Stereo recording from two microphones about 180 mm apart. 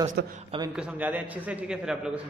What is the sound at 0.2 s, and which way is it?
Speech, 70° right (ahead or behind).